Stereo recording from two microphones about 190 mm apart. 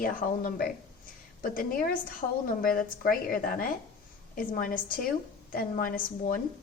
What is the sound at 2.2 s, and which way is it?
Speech, 30° left (ahead or behind).